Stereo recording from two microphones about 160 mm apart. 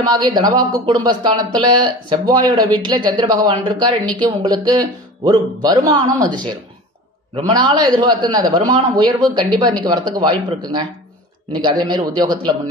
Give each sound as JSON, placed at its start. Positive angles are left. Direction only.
{"t": 0.0, "sound": "a man's voice", "side_deg": -25}
{"t": 11.6, "sound": "speech", "side_deg": -25}